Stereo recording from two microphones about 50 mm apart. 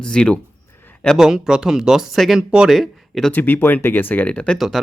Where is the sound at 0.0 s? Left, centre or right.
Centre.